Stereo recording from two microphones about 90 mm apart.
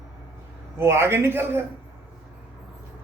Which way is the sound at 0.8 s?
30° right (ahead or behind).